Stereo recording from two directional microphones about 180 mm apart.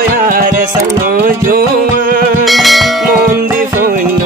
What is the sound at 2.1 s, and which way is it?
Music, 50° right (ahead or behind).